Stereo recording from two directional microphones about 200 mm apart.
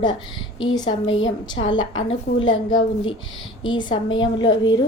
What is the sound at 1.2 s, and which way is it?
A woman's voice, 70° left (ahead or behind).